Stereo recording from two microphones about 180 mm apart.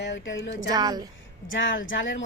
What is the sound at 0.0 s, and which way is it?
Speech, 90° left.